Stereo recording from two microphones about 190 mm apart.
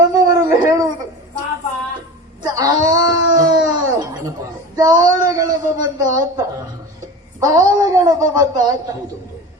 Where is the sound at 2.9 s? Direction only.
20° right (ahead or behind).